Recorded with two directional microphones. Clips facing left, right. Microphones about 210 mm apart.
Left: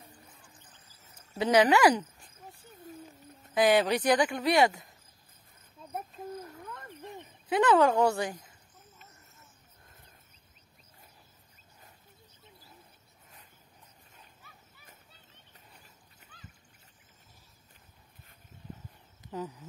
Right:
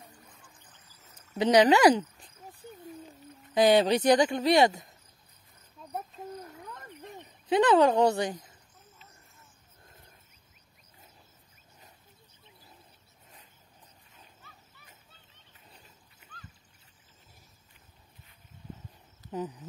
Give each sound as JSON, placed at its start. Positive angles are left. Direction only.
{"t": 1.4, "sound": "speech", "side_deg": -20}
{"t": 2.4, "sound": "a sound", "side_deg": -20}
{"t": 3.5, "sound": "speech", "side_deg": -25}
{"t": 7.2, "sound": "speech", "side_deg": -20}
{"t": 19.3, "sound": "speech", "side_deg": -15}